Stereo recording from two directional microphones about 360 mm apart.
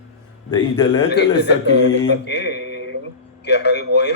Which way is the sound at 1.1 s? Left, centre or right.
Left.